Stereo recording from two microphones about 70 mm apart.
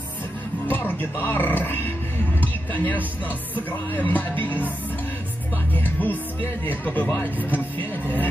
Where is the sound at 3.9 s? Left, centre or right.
Left.